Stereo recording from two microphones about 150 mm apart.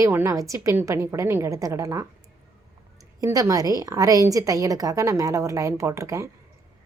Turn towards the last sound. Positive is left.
turn(degrees=-20)  # may be behind; listen again after turning